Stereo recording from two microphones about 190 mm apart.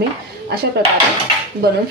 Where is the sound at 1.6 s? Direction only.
55° right (ahead or behind).